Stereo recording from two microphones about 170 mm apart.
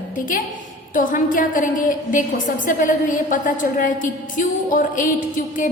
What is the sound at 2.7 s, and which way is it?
A woman's voice, 50° left (ahead or behind).